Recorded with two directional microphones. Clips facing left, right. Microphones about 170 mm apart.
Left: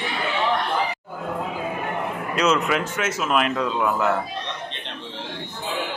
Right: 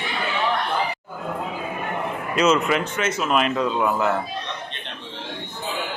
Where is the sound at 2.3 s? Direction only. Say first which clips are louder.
Right 2 dB; centre (ahead or behind).